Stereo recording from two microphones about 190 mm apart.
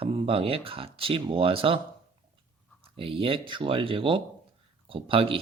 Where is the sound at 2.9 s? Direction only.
30° right (ahead or behind).